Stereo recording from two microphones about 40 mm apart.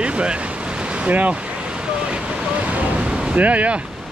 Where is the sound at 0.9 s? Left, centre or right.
Right.